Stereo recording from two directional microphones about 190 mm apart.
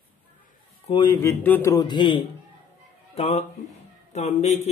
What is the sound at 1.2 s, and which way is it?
A man's voice, 10° left (ahead or behind).